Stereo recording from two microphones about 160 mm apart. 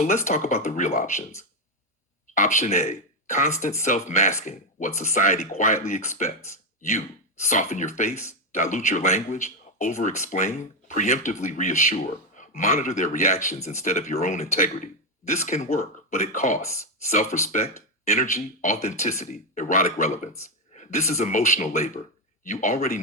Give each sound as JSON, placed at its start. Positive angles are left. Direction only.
{"t": 0.0, "sound": "speech", "side_deg": 50}
{"t": 2.3, "sound": "speech", "side_deg": 50}
{"t": 7.4, "sound": "speech", "side_deg": 50}
{"t": 8.1, "sound": "speech", "side_deg": 15}
{"t": 8.5, "sound": "speech", "side_deg": 50}